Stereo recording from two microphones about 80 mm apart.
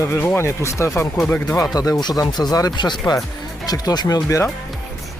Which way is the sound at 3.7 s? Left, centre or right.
Left.